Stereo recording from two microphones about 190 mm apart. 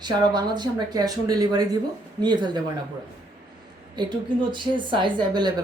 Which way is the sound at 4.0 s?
25° right (ahead or behind).